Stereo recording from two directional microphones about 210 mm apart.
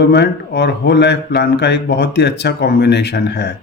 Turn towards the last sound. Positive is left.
turn(degrees=50)  # may be behind; listen again after turning